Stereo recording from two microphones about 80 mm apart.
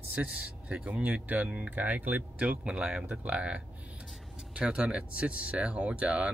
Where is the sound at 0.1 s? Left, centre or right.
Centre.